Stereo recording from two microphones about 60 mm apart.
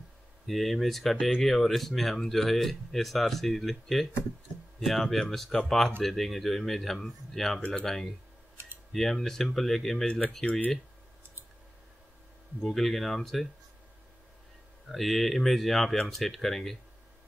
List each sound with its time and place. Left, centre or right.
0.5 s speech: centre
8.6 s typing: right
8.9 s speech: centre
12.7 s speech: centre
14.9 s speech: centre